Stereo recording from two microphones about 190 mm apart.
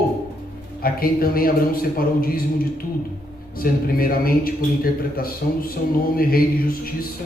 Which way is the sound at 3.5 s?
50° left (ahead or behind).